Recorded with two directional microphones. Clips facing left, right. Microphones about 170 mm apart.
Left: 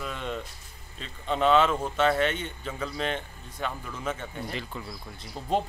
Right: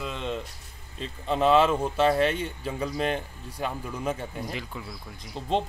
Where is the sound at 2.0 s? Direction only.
35° right (ahead or behind).